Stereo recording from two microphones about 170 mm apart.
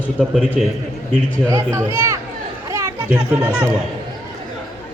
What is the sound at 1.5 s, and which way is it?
Speech, 20° right (ahead or behind).